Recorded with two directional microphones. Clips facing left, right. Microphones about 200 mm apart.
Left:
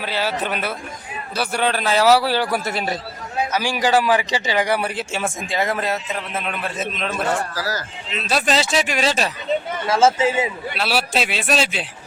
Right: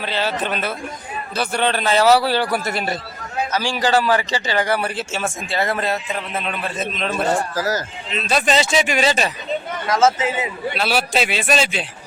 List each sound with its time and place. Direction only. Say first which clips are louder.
0.0 s a man's voice: right 1 dB; 10° left (ahead or behind)
9.9 s a man's voice: left 1 dB; 30° left (ahead or behind)
10.8 s speech: right 1 dB; centre (ahead or behind)